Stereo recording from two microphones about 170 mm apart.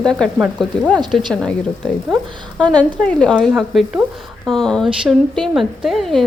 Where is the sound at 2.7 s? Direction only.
5° left (ahead or behind).